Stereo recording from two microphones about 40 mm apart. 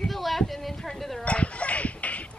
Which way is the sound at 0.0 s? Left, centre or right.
Centre.